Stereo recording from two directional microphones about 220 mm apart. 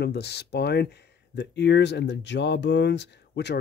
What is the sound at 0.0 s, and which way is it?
Speech, 50° left (ahead or behind).